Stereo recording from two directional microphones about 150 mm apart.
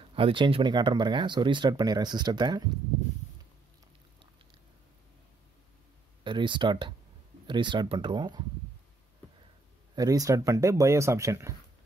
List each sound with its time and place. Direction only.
0.0 s speech: 35° right (ahead or behind)
6.2 s speech: 30° right (ahead or behind)
9.9 s speech: 25° right (ahead or behind)